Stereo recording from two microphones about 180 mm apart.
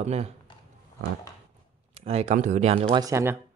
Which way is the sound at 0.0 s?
35° right (ahead or behind).